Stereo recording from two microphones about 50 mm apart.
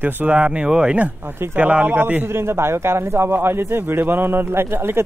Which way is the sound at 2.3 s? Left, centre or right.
Right.